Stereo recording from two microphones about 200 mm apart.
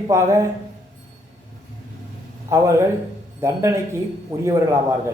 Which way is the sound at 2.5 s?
15° right (ahead or behind).